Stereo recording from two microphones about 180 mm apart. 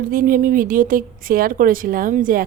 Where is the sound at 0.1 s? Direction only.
50° right (ahead or behind).